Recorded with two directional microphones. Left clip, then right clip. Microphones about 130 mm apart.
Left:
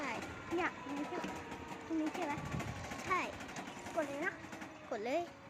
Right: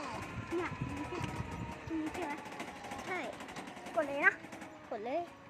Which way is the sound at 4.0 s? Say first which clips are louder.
Right 4 dB; 20° right (ahead or behind).